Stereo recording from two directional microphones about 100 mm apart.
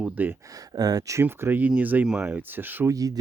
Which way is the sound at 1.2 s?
20° right (ahead or behind).